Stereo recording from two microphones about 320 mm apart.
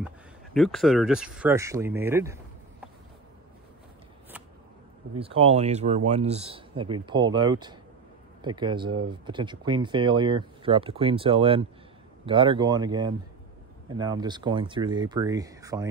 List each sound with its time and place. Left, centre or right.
0.0 s speech: centre
5.2 s speech: centre